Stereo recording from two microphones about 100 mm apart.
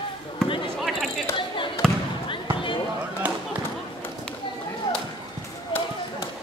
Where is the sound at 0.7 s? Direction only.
Centre (ahead or behind).